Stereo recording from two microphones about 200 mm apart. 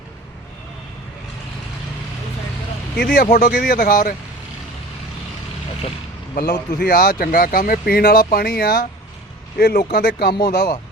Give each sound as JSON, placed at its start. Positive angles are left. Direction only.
{"t": 3.0, "sound": "speech", "side_deg": 50}
{"t": 6.3, "sound": "speech", "side_deg": 50}